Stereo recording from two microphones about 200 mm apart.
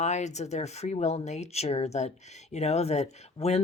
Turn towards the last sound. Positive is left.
turn(degrees=30)  # may be behind; listen again after turning